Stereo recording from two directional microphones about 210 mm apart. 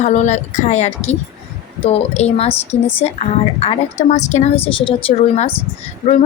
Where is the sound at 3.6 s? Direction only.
30° left (ahead or behind).